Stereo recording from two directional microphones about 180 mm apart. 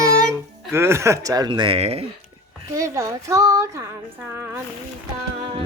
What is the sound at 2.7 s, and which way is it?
Speech, 15° right (ahead or behind).